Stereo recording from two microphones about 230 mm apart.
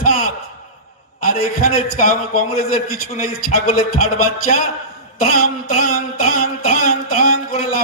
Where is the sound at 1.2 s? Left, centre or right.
Left.